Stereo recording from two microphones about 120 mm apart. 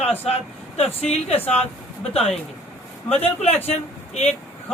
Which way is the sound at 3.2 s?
60° left (ahead or behind).